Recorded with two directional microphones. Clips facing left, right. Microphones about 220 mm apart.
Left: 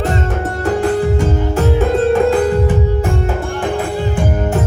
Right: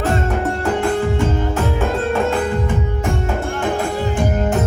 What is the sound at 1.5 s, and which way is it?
Music, 35° left (ahead or behind).